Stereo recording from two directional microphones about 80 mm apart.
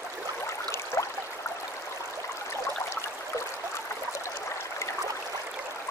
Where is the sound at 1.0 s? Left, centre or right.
Left.